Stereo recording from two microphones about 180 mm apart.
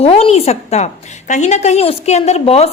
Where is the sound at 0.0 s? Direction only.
35° left (ahead or behind).